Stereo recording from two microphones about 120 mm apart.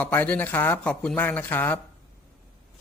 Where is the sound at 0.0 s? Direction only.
15° left (ahead or behind).